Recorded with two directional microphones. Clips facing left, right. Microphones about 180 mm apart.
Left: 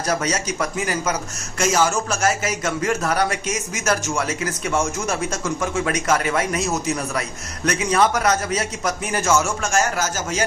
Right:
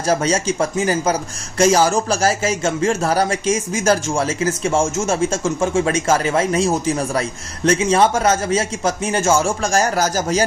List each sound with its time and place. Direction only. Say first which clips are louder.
0.1 s a man's voice: right 6 dB; 30° right (ahead or behind)